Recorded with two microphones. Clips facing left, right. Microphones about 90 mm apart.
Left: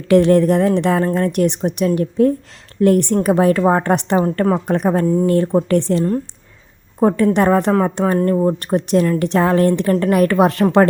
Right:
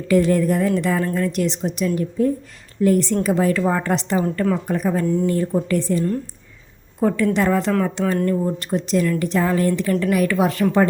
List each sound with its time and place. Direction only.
0.1 s a woman's voice: 65° left (ahead or behind)
4.2 s a woman's voice: 40° left (ahead or behind)
4.6 s a woman's voice: 65° left (ahead or behind)
7.0 s a woman's voice: 50° left (ahead or behind)
7.7 s a woman's voice: 30° left (ahead or behind); by 10.8 s 60° left (ahead or behind)